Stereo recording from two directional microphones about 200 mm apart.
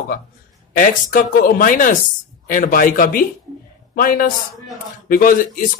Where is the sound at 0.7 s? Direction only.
45° left (ahead or behind).